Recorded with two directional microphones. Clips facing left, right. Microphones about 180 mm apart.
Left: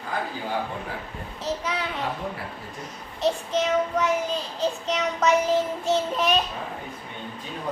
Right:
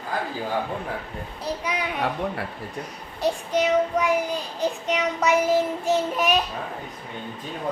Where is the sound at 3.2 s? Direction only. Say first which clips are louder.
Right 1 dB; 10° right (ahead or behind).